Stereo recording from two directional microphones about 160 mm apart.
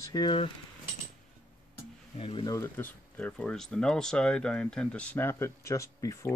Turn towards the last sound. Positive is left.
turn(degrees=20)  # may be behind; listen again after turning